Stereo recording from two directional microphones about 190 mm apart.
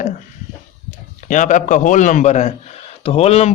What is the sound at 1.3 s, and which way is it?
Speech, 40° left (ahead or behind).